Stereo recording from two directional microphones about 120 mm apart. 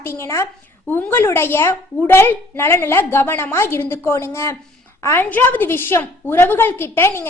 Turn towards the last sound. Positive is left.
turn(degrees=20)  # may be behind; listen again after turning